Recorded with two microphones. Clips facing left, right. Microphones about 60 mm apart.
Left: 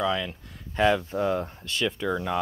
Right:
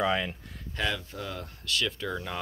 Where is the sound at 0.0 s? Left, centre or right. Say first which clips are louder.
Left 1 dB; right.